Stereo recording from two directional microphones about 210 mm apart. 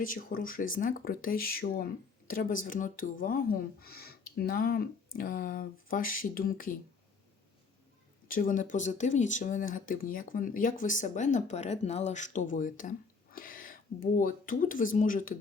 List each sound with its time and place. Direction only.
0.0 s speech: 40° left (ahead or behind)
8.3 s speech: 40° left (ahead or behind)